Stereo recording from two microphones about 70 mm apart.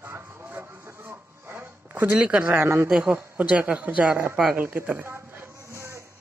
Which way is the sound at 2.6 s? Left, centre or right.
Right.